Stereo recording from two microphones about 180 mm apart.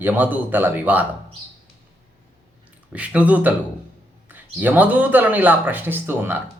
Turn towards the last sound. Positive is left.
turn(degrees=-10)  # may be behind; listen again after turning